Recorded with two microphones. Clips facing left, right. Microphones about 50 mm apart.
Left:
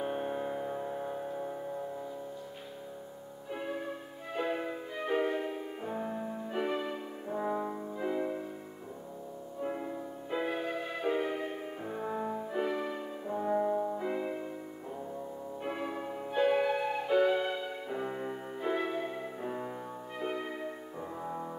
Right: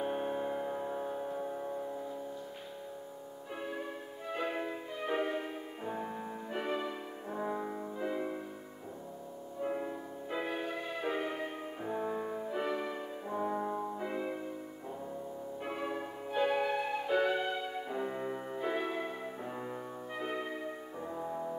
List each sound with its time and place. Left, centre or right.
0.0 s music: centre
3.5 s music: centre
9.6 s music: centre
15.7 s music: centre
21.2 s music: centre